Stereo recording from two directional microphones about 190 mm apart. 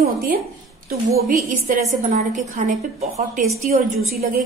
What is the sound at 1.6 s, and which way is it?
A woman's voice, 40° right (ahead or behind).